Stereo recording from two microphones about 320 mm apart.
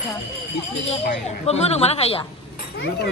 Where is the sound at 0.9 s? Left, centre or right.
Centre.